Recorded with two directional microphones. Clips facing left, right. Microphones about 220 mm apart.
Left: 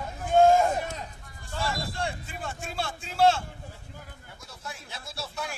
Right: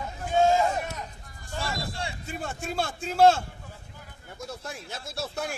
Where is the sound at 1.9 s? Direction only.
55° left (ahead or behind).